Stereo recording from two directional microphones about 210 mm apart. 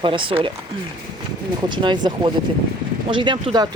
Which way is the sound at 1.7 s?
20° right (ahead or behind).